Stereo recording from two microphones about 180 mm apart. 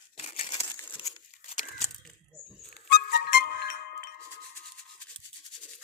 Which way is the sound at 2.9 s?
60° left (ahead or behind).